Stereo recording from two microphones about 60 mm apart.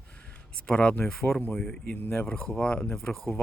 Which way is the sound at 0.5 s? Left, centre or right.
Centre.